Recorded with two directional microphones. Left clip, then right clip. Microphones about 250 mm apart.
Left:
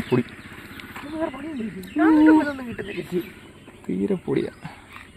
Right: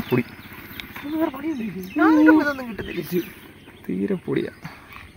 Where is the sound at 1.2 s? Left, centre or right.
Right.